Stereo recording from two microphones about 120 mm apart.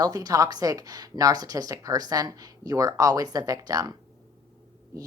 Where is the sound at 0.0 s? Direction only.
30° right (ahead or behind).